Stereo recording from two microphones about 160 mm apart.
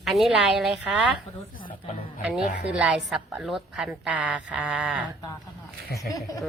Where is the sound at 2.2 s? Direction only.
10° right (ahead or behind).